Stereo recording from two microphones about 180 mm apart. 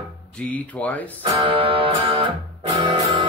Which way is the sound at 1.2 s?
30° right (ahead or behind).